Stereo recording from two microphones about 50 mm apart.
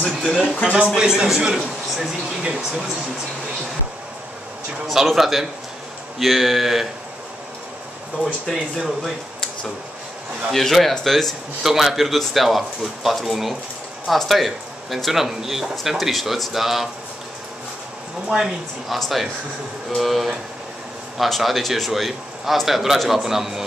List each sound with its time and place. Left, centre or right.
0.0 s speech: centre
0.9 s a man's voice: centre
4.8 s a man's voice: centre
8.2 s a man's voice: centre
10.5 s a man's voice: centre
18.3 s a man's voice: centre